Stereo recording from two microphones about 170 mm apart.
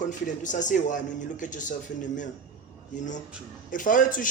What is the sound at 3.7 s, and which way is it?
Speech, 50° left (ahead or behind).